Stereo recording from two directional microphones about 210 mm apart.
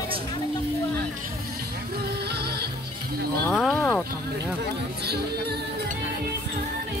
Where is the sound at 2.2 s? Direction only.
50° right (ahead or behind).